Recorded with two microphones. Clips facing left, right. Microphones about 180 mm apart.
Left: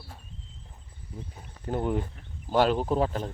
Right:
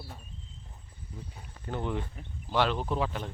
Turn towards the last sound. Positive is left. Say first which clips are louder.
# left 5 dB
turn(degrees=40)  # may be behind; listen again after turning